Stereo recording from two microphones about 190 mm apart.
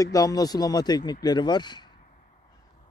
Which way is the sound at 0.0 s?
20° left (ahead or behind).